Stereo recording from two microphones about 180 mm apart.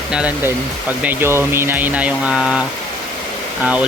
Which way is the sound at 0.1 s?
5° right (ahead or behind).